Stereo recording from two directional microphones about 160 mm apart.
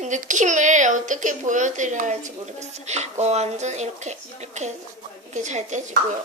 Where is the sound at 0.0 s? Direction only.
50° right (ahead or behind).